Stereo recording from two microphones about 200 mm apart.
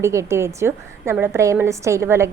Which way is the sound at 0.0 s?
15° right (ahead or behind).